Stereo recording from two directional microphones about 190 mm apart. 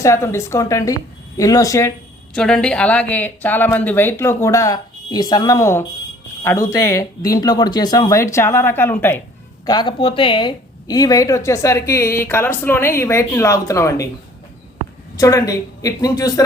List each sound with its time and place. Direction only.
0.0 s a woman's voice: 15° left (ahead or behind)
2.3 s a woman's voice: 5° left (ahead or behind)
9.6 s a woman's voice: 25° left (ahead or behind)
15.1 s a woman's voice: 20° left (ahead or behind)